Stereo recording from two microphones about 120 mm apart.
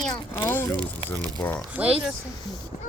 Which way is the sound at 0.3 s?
20° left (ahead or behind).